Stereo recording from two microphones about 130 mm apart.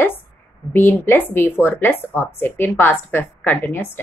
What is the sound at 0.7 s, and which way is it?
A woman's voice, 15° left (ahead or behind).